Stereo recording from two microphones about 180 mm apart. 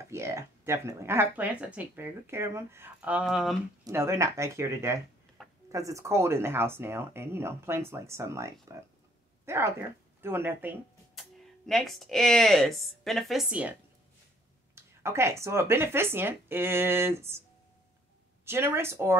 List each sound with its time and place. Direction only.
0.1 s speech: 15° right (ahead or behind)
3.8 s speech: 15° right (ahead or behind)
11.1 s speech: centre (ahead or behind)
14.8 s speech: 15° right (ahead or behind)
18.4 s speech: 15° right (ahead or behind)